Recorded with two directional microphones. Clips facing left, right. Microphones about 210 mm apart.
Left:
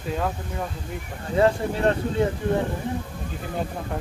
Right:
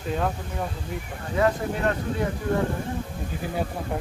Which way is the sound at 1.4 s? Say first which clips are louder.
Left 3 dB; 30° left (ahead or behind).